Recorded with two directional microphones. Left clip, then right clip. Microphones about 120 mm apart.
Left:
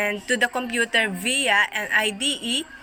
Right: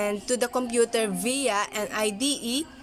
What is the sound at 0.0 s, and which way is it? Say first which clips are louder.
A woman's voice: left 4 dB; 50° right (ahead or behind).